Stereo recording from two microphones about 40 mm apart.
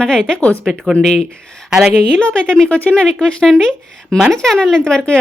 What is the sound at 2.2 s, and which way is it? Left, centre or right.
A woman's voice, left.